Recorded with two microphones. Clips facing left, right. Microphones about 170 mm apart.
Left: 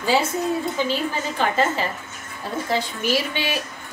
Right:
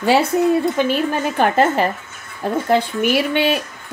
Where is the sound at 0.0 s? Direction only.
65° right (ahead or behind).